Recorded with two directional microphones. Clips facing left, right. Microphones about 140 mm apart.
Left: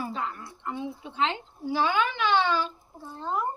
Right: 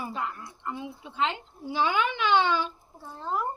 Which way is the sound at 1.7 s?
20° right (ahead or behind).